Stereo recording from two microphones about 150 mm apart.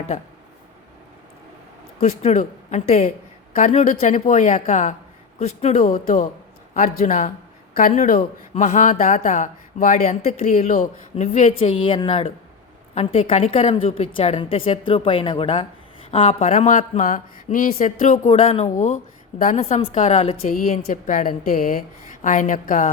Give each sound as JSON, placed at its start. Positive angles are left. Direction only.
{"t": 2.0, "sound": "a woman's voice", "side_deg": 50}
{"t": 18.3, "sound": "speech", "side_deg": 45}
{"t": 18.7, "sound": "a woman's voice", "side_deg": 55}
{"t": 19.5, "sound": "speech", "side_deg": 45}
{"t": 20.5, "sound": "a woman's voice", "side_deg": 55}